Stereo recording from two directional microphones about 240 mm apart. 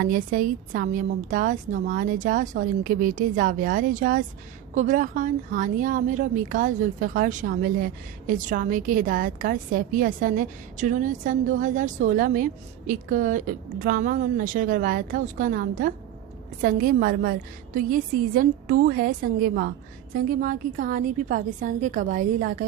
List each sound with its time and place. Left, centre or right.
0.0 s a woman's voice: right